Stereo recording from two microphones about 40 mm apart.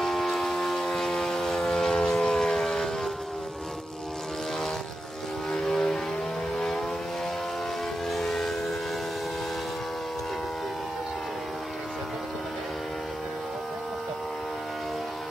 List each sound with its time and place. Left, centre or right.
0.0 s siren: centre
1.6 s civil defense siren: left
5.5 s vehicle: centre
8.1 s vehicle: centre